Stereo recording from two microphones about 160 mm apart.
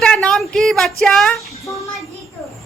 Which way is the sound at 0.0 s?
5° left (ahead or behind).